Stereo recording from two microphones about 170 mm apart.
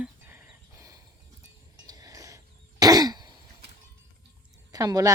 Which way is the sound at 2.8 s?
20° right (ahead or behind).